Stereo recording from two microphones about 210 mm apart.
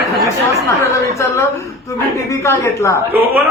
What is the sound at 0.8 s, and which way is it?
Speech, 15° left (ahead or behind).